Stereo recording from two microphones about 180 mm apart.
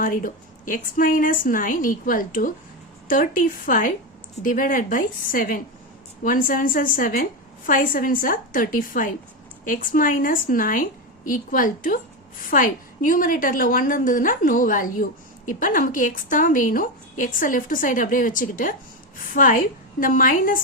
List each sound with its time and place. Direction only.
0.0 s a woman's voice: 50° left (ahead or behind)